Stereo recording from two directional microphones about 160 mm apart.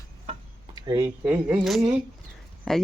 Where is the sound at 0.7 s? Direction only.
20° right (ahead or behind).